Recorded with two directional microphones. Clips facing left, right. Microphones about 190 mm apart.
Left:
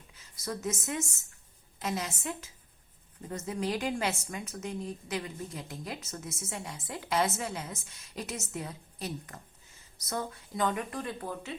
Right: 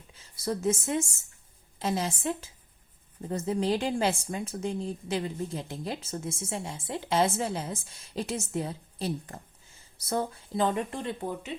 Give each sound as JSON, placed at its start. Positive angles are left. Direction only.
{"t": 0.1, "sound": "a woman's voice", "side_deg": -30}